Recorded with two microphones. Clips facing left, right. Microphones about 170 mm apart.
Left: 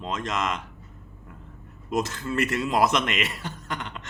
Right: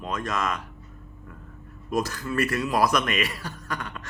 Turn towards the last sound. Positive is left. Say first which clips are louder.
# even
turn(degrees=20)  # may be behind; listen again after turning